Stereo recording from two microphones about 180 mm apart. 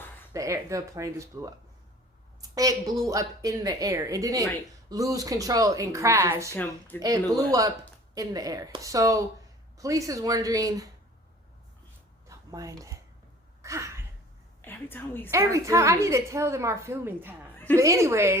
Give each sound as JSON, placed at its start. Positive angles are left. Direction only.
{"t": 0.3, "sound": "a woman's voice", "side_deg": -15}
{"t": 6.6, "sound": "speech", "side_deg": 10}
{"t": 7.0, "sound": "a woman's voice", "side_deg": -20}
{"t": 12.3, "sound": "speech", "side_deg": -20}
{"t": 13.6, "sound": "a sound", "side_deg": -15}
{"t": 14.6, "sound": "a woman's voice", "side_deg": 10}
{"t": 15.3, "sound": "a woman's voice", "side_deg": -15}